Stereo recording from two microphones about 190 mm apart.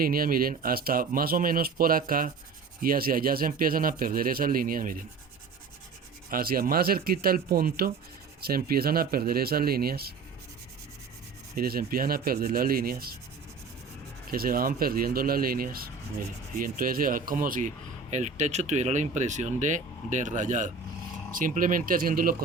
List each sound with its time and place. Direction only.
0.0 s speech: 50° right (ahead or behind)
6.3 s speech: 50° right (ahead or behind)
11.5 s speech: 50° right (ahead or behind)
14.3 s speech: 50° right (ahead or behind)